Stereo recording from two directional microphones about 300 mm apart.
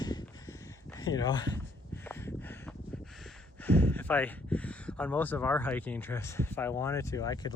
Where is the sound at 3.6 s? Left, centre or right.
Centre.